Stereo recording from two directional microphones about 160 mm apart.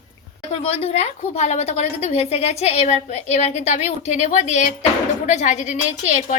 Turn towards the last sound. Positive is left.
turn(degrees=50)  # may be behind; listen again after turning